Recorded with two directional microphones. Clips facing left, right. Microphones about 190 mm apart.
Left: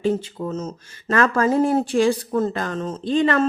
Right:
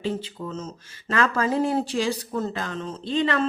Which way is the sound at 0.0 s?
50° left (ahead or behind).